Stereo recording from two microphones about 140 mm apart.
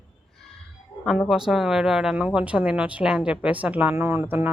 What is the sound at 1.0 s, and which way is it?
Speech, centre (ahead or behind).